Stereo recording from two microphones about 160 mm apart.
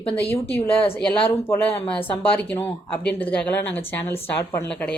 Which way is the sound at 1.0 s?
10° left (ahead or behind).